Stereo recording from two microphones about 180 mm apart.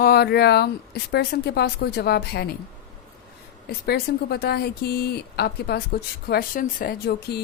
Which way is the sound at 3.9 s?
60° left (ahead or behind).